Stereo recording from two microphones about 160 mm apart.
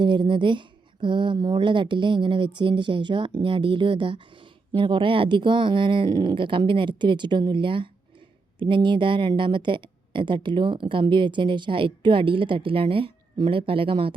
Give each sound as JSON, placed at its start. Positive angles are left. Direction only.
{"t": 0.0, "sound": "a woman's voice", "side_deg": -30}